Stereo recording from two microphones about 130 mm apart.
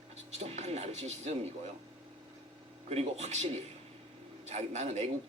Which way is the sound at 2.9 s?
55° right (ahead or behind).